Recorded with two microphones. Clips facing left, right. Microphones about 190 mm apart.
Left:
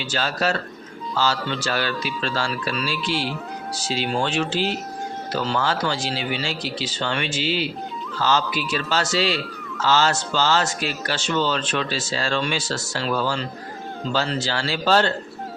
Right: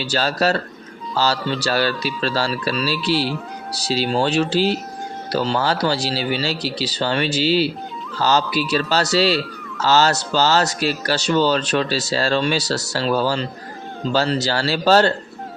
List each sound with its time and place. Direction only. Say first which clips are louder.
0.0 s speech: right 4 dB; 35° right (ahead or behind)
3.1 s speech: right 7 dB; 5° right (ahead or behind)
3.8 s speech: right 5 dB; 35° right (ahead or behind)